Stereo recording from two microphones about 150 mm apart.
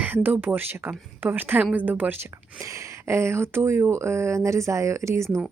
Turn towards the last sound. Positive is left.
turn(degrees=-20)  # may be behind; listen again after turning